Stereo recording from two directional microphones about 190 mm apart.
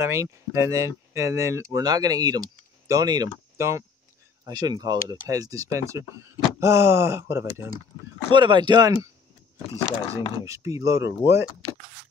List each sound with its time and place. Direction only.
0.0 s speech: 15° right (ahead or behind)
8.3 s speech: 25° right (ahead or behind)
9.8 s speech: 30° left (ahead or behind)
10.4 s speech: 15° right (ahead or behind)